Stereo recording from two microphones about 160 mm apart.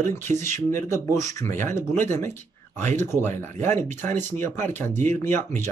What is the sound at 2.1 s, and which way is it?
Speech, 15° left (ahead or behind).